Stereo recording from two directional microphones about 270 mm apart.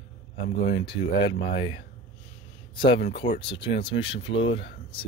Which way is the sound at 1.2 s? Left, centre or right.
Left.